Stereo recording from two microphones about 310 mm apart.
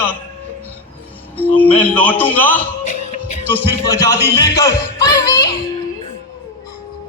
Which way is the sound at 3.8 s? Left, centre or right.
Centre.